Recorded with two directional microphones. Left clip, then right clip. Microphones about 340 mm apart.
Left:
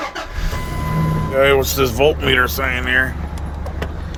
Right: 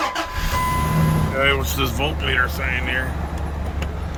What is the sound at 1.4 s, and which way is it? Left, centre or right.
Speech, centre.